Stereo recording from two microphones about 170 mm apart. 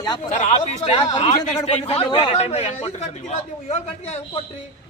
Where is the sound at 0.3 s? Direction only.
45° left (ahead or behind).